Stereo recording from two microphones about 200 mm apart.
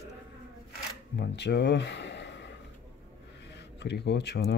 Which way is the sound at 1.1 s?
60° left (ahead or behind).